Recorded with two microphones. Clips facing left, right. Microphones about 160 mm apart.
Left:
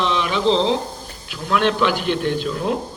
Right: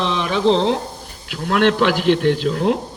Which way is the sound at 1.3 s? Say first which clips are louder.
Right 3 dB; 65° right (ahead or behind).